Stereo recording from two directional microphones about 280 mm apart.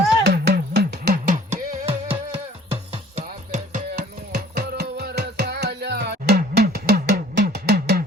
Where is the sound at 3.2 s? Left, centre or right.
Right.